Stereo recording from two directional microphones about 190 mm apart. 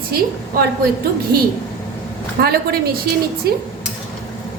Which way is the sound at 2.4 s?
55° right (ahead or behind).